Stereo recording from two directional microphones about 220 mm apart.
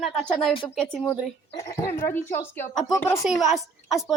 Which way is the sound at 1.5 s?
15° left (ahead or behind).